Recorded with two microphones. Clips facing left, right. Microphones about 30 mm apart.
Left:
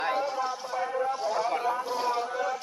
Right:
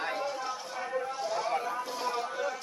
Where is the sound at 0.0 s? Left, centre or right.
Centre.